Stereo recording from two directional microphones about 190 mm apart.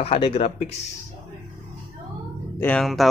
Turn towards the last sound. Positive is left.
turn(degrees=5)  # may be behind; listen again after turning